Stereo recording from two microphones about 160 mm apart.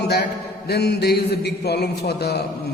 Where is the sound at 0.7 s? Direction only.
90° left.